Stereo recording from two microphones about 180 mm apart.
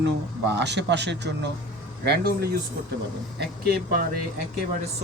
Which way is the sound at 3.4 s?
55° right (ahead or behind).